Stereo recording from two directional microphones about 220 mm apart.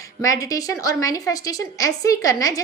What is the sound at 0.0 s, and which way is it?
A woman's voice, 15° left (ahead or behind).